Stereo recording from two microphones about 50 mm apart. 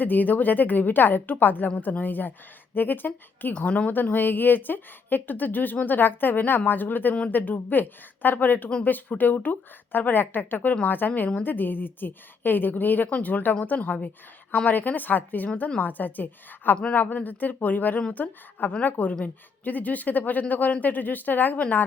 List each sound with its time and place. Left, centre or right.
0.0 s a woman's voice: left
3.7 s speech: left
3.9 s a woman's voice: left